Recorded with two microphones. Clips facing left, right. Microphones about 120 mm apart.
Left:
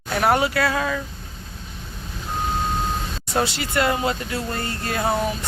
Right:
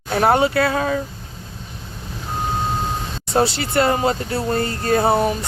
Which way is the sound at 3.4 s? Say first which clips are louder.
Right 4 dB; 30° right (ahead or behind).